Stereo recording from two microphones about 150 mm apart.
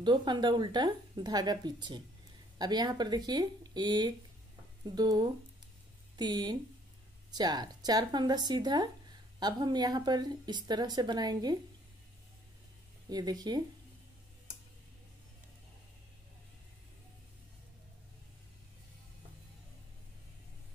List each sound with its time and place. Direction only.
0.0 s speech: 30° right (ahead or behind)
13.1 s speech: 25° right (ahead or behind)